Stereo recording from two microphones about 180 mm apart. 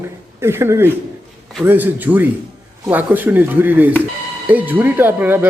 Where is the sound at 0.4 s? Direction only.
15° right (ahead or behind).